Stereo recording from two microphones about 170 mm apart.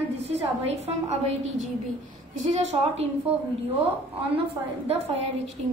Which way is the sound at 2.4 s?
40° right (ahead or behind).